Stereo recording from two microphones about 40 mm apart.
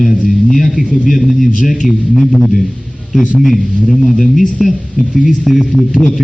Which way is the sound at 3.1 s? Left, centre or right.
Centre.